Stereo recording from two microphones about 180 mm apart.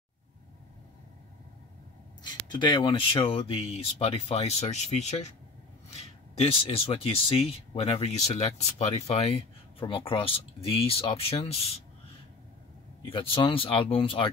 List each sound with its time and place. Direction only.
2.2 s speech: 25° left (ahead or behind)
13.0 s speech: 30° left (ahead or behind)